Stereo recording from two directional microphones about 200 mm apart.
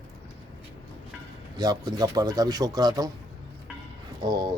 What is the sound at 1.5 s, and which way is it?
Speech, 20° right (ahead or behind).